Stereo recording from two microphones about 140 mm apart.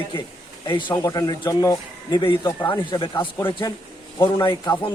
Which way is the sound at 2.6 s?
15° left (ahead or behind).